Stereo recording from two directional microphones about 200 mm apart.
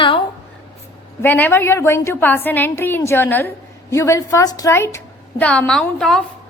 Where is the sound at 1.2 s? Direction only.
10° left (ahead or behind).